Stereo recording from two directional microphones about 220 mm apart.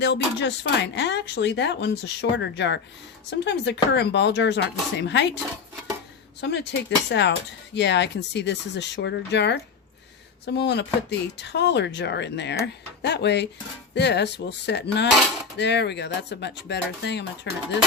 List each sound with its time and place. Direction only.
0.0 s speech: 55° left (ahead or behind)
6.4 s speech: 50° left (ahead or behind)